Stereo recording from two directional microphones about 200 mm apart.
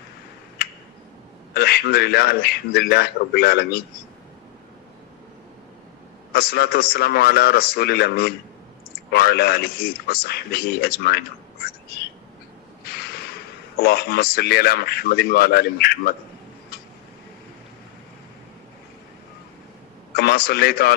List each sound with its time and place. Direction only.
1.5 s a man's voice: 50° left (ahead or behind)
6.3 s a man's voice: 50° left (ahead or behind)
12.8 s a sound: 50° left (ahead or behind)
13.7 s a man's voice: 50° left (ahead or behind)
20.1 s a man's voice: 50° left (ahead or behind)